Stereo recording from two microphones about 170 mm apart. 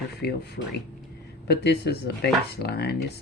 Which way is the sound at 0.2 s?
70° left (ahead or behind).